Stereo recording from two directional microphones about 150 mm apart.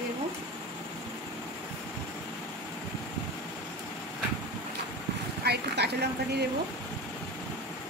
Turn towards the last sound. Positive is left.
turn(degrees=-90)